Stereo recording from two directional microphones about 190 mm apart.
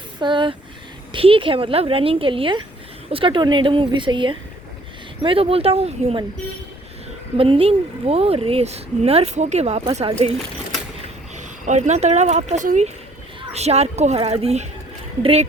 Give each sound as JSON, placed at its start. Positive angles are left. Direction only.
{"t": 0.2, "sound": "a woman's voice", "side_deg": -25}
{"t": 7.3, "sound": "a woman's voice", "side_deg": -30}
{"t": 11.3, "sound": "a woman's voice", "side_deg": -40}